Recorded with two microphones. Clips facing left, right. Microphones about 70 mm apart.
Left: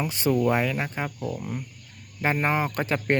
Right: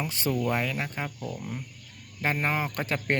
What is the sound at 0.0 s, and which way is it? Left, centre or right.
Speech, centre.